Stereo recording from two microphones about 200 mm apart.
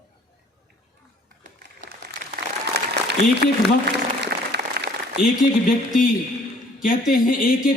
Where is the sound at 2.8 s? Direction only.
55° right (ahead or behind).